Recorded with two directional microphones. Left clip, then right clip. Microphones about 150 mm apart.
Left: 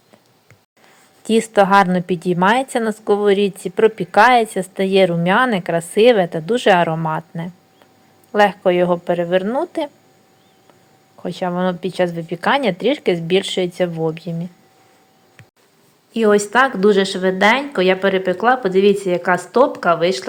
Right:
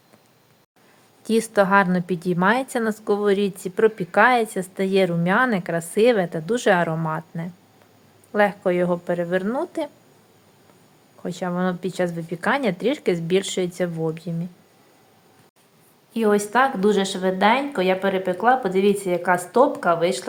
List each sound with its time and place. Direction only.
1.2 s a woman's voice: 15° left (ahead or behind)
11.2 s a woman's voice: 15° left (ahead or behind)
16.1 s a woman's voice: 20° left (ahead or behind)